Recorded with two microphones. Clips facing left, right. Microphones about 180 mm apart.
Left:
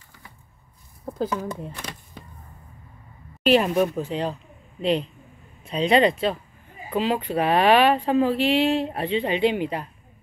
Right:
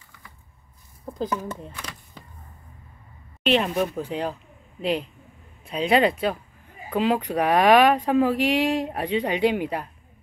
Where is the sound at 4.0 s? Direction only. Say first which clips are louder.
Left 1 dB; 10° right (ahead or behind).